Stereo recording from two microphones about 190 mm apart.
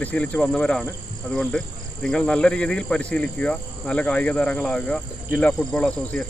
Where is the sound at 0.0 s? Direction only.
5° left (ahead or behind).